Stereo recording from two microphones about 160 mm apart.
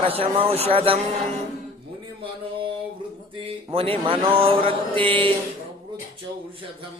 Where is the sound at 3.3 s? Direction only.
30° right (ahead or behind).